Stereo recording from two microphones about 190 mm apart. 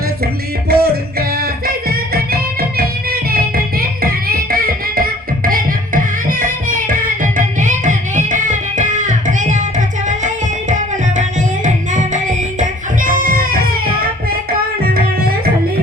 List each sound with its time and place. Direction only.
0.7 s music: 55° right (ahead or behind)